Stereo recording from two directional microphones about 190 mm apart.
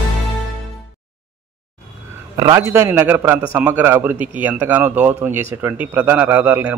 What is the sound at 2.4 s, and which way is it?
A man's voice, 15° right (ahead or behind).